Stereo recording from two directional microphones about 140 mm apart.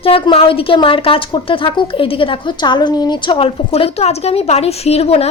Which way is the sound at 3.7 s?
50° left (ahead or behind).